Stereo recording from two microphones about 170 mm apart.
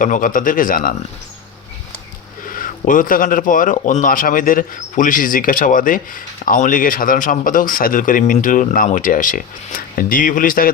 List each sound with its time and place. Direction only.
0.0 s a man's voice: 50° left (ahead or behind)
2.5 s a man's voice: 55° left (ahead or behind)